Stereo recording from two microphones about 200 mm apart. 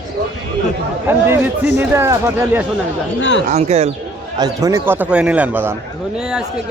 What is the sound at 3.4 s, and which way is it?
Speech, 35° right (ahead or behind).